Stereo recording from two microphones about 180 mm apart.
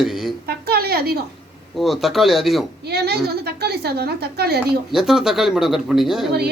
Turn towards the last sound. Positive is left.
turn(degrees=0)  # may be behind; listen again after turning